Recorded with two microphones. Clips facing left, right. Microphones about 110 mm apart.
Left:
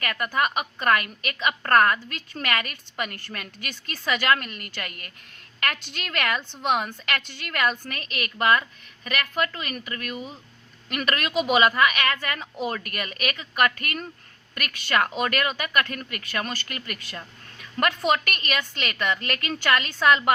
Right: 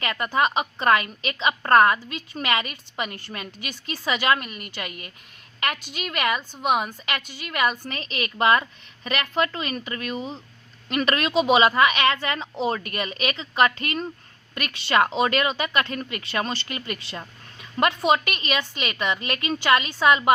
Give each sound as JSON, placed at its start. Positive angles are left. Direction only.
{"t": 0.0, "sound": "a woman's voice", "side_deg": -25}
{"t": 7.9, "sound": "a woman's voice", "side_deg": -25}